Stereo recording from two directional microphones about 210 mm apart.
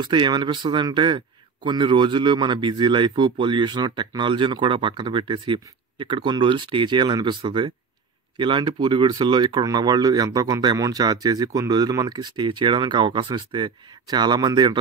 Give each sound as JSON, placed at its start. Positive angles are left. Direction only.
{"t": 0.0, "sound": "speech", "side_deg": -20}